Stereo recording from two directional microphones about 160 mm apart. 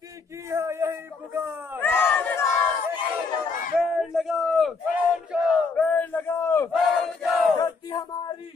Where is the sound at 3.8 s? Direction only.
Centre (ahead or behind).